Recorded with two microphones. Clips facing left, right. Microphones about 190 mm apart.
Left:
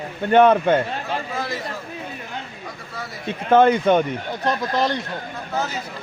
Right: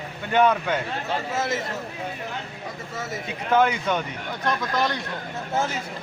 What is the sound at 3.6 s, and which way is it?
Speech, 50° left (ahead or behind).